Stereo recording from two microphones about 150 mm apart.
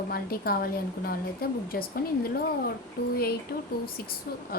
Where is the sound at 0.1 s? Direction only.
80° left.